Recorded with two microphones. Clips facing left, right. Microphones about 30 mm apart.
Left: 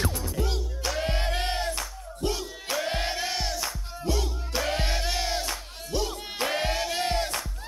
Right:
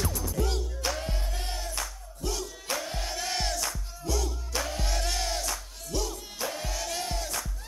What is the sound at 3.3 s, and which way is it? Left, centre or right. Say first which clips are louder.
Music: left 1 dB; centre.